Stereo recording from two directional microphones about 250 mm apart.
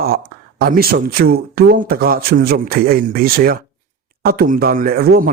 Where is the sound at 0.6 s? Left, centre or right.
Right.